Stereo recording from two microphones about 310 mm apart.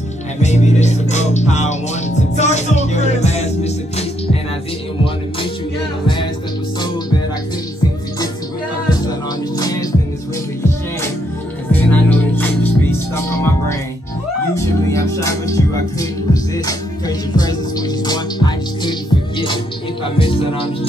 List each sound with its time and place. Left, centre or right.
0.4 s music: left
9.6 s music: centre
11.7 s music: centre
17.4 s music: centre